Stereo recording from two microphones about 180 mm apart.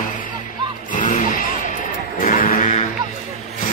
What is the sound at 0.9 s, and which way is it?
Music, 45° left (ahead or behind).